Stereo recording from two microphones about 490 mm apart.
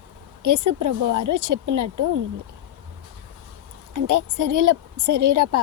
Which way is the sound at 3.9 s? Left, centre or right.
Right.